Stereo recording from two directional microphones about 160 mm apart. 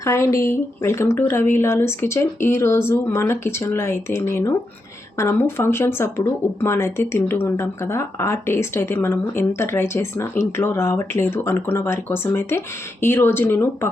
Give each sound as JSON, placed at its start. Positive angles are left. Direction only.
{"t": 0.0, "sound": "speech", "side_deg": 15}